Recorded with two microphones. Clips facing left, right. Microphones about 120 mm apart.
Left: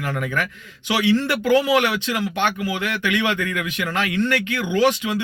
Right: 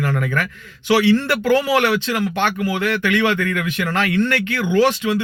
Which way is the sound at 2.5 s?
50° right (ahead or behind).